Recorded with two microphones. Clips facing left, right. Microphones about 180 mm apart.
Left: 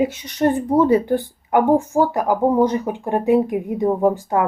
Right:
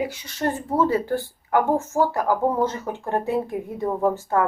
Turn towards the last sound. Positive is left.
turn(degrees=15)  # may be behind; listen again after turning